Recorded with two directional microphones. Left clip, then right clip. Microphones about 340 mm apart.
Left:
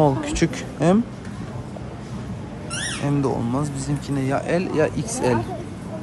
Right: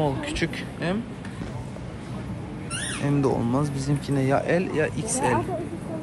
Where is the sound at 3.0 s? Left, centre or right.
Centre.